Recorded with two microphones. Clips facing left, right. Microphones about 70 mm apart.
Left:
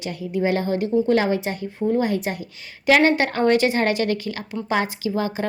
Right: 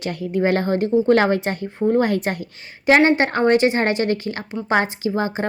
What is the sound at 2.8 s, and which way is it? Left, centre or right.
A woman's voice, right.